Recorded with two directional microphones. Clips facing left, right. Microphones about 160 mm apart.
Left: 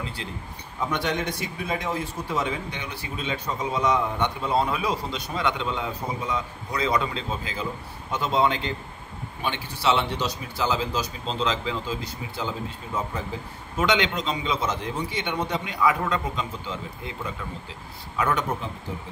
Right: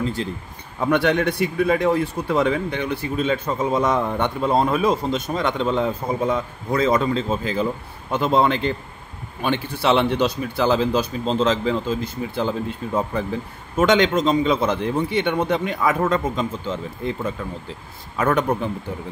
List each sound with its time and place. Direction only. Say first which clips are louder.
0.0 s a man's voice: right 10 dB; 40° right (ahead or behind)
0.7 s a man's voice: right 8 dB; 60° right (ahead or behind)